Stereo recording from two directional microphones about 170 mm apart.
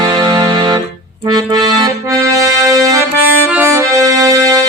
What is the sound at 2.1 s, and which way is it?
Music, 20° right (ahead or behind).